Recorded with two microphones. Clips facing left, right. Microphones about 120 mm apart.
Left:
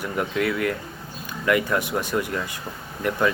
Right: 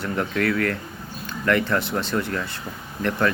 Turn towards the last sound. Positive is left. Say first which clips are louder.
# even
turn(degrees=10)  # may be behind; listen again after turning